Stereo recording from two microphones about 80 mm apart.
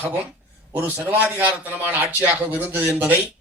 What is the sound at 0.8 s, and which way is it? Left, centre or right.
A man's voice, right.